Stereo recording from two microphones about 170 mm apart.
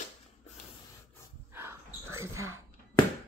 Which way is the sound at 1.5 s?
15° right (ahead or behind).